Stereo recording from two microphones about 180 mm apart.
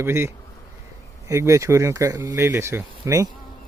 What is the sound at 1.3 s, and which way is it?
Speech, 15° right (ahead or behind).